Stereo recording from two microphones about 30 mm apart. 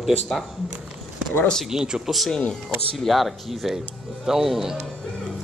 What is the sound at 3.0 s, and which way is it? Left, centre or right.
A man's voice, centre.